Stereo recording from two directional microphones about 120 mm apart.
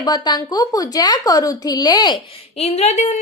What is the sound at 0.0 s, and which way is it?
A woman's voice, 35° left (ahead or behind).